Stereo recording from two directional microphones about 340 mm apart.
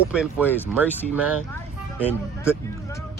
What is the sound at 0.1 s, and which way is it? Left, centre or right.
Speech, centre.